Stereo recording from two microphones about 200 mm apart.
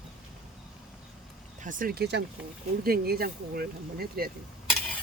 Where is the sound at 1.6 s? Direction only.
40° right (ahead or behind).